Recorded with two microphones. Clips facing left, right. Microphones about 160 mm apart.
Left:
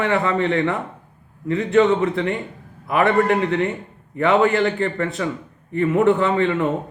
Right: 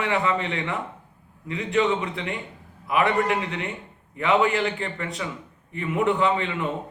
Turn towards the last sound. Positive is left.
turn(degrees=45)  # may be behind; listen again after turning